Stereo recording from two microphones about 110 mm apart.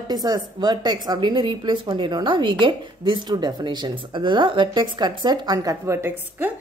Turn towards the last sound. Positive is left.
turn(degrees=-20)  # may be behind; listen again after turning